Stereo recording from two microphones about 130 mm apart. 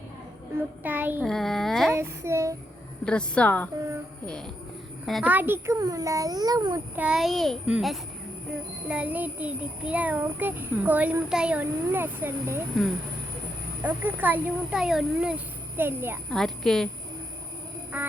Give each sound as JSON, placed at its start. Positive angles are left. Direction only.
{"t": 0.8, "sound": "a child's voice", "side_deg": -15}
{"t": 1.2, "sound": "a child's voice", "side_deg": 0}
{"t": 1.9, "sound": "a child's voice", "side_deg": -20}
{"t": 3.0, "sound": "a woman's voice", "side_deg": 5}
{"t": 5.2, "sound": "a child's voice", "side_deg": -15}
{"t": 6.9, "sound": "a child's voice", "side_deg": -10}
{"t": 8.9, "sound": "a child's voice", "side_deg": -10}
{"t": 13.8, "sound": "a child's voice", "side_deg": -15}
{"t": 15.8, "sound": "a child's voice", "side_deg": -15}
{"t": 16.3, "sound": "a child's voice", "side_deg": 5}
{"t": 17.9, "sound": "a child's voice", "side_deg": -10}